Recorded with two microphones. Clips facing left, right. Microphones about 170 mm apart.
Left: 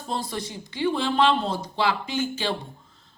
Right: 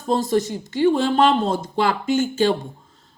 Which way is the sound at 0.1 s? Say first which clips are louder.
Right 11 dB; 45° right (ahead or behind).